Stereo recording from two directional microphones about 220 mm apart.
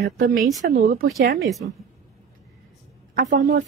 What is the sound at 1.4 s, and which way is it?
Speech, centre (ahead or behind).